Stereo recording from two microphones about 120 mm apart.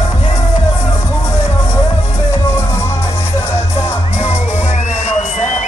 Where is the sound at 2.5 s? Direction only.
25° left (ahead or behind).